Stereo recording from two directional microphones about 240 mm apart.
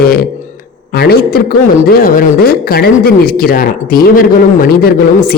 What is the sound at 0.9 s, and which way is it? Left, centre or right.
Speech, left.